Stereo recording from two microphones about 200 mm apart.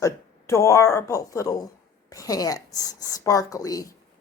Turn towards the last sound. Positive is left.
turn(degrees=20)  # may be behind; listen again after turning